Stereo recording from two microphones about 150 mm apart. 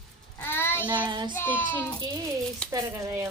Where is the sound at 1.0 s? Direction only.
30° right (ahead or behind).